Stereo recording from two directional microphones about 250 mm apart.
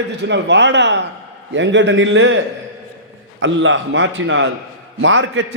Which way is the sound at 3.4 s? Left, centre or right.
Right.